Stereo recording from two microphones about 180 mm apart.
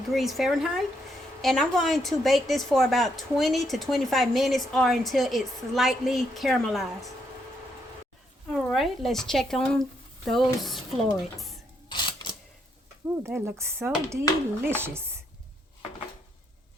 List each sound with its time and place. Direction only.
0.1 s speech: centre (ahead or behind)
8.4 s speech: centre (ahead or behind)
11.9 s camera: 25° left (ahead or behind)
13.2 s speech: 15° right (ahead or behind)